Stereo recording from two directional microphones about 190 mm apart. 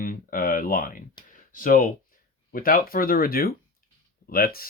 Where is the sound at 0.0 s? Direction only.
45° left (ahead or behind).